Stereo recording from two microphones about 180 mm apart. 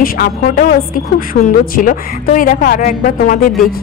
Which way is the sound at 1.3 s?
90° left.